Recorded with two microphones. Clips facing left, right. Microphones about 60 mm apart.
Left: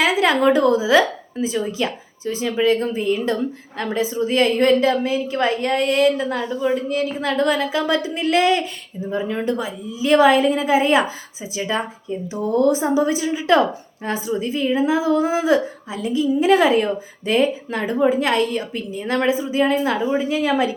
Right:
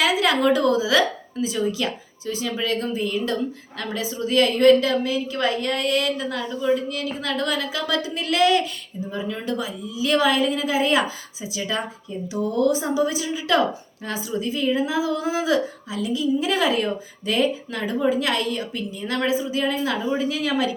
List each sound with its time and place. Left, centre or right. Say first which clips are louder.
0.0 s speech: left 3 dB; left